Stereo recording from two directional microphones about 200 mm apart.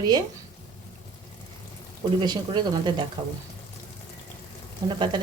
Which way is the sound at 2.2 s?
25° right (ahead or behind).